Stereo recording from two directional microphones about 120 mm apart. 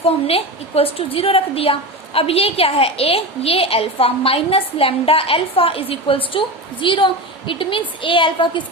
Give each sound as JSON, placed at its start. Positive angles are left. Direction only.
{"t": 0.0, "sound": "a woman's voice", "side_deg": 55}